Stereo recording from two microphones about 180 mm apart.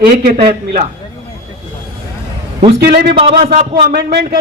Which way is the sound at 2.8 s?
65° right (ahead or behind).